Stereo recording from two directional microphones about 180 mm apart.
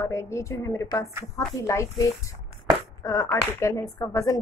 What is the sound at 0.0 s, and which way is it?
Speech, 15° left (ahead or behind).